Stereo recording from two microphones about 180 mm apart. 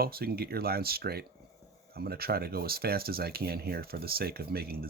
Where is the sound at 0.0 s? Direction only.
55° right (ahead or behind).